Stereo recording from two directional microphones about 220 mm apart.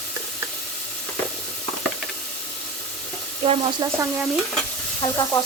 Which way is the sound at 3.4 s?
25° right (ahead or behind).